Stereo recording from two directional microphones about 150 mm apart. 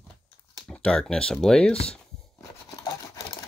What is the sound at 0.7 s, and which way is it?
Speech, 5° left (ahead or behind).